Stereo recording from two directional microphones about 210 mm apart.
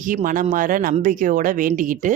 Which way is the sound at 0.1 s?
40° right (ahead or behind).